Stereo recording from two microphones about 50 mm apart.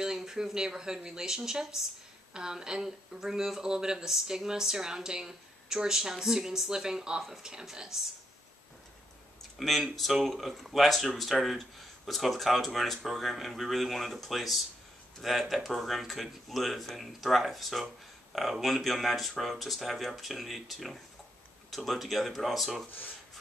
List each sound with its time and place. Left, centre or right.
0.0 s speech: centre
9.6 s speech: centre